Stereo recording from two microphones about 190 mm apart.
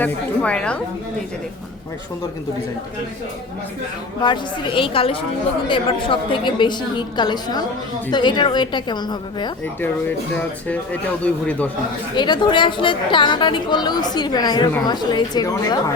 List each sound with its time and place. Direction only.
0.0 s a woman's voice: 5° left (ahead or behind)
4.2 s a woman's voice: 25° left (ahead or behind)
12.1 s a woman's voice: 25° left (ahead or behind)